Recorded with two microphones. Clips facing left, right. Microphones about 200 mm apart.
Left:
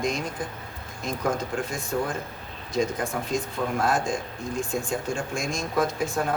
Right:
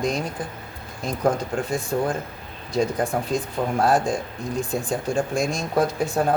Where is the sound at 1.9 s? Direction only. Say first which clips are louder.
Right 3 dB; 35° right (ahead or behind).